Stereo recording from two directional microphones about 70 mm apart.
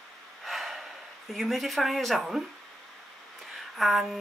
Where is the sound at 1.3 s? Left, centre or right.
Centre.